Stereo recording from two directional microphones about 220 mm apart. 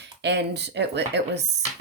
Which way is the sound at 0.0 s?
50° right (ahead or behind).